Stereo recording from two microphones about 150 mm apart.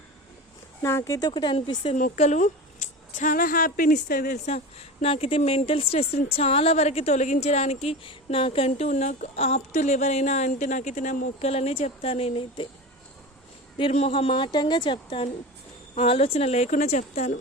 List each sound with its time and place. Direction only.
0.8 s speech: 20° left (ahead or behind); by 2.0 s 35° left (ahead or behind)
2.0 s a woman's voice: 65° left (ahead or behind)
2.2 s speech: 50° left (ahead or behind)
3.2 s speech: 65° left (ahead or behind)
4.4 s speech: 50° left (ahead or behind)
11.4 s speech: 45° left (ahead or behind)
13.7 s a woman's voice: 40° left (ahead or behind)